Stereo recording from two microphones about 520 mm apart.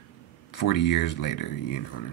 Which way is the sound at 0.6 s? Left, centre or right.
Left.